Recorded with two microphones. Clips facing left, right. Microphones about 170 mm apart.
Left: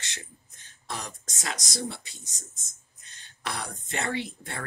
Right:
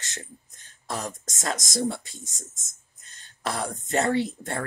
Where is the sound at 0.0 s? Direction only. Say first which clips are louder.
Right 3 dB; 45° right (ahead or behind).